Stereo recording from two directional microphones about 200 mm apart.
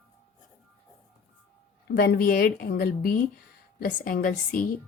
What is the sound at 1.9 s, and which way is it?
Speech, 50° left (ahead or behind).